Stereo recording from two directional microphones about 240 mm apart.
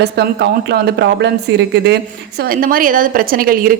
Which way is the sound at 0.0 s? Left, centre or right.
Right.